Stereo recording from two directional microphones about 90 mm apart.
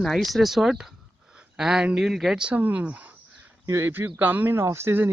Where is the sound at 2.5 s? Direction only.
20° right (ahead or behind).